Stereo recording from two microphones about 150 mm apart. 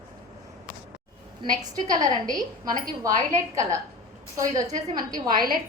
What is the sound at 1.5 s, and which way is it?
Speech, 25° right (ahead or behind).